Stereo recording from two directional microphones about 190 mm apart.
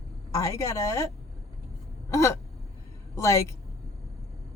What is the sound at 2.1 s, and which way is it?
A woman's voice, 15° left (ahead or behind).